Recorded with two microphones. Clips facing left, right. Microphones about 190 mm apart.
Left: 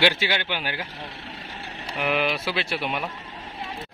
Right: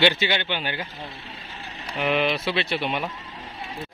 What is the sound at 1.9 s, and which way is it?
A man's voice, 5° left (ahead or behind).